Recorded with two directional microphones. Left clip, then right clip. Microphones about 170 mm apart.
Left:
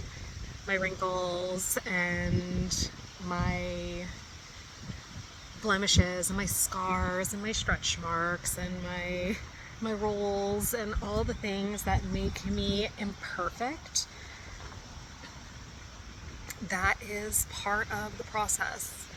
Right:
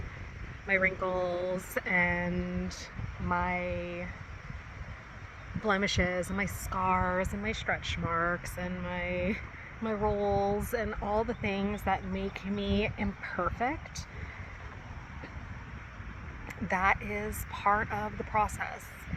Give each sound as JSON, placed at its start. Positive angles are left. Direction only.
{"t": 0.7, "sound": "speech", "side_deg": 20}
{"t": 1.2, "sound": "speech", "side_deg": -5}
{"t": 1.7, "sound": "speech", "side_deg": 25}
{"t": 5.6, "sound": "speech", "side_deg": 25}
{"t": 10.8, "sound": "speech", "side_deg": -5}
{"t": 11.4, "sound": "speech", "side_deg": 25}
{"t": 12.4, "sound": "speech", "side_deg": 0}
{"t": 13.0, "sound": "speech", "side_deg": 20}
{"t": 16.5, "sound": "speech", "side_deg": 25}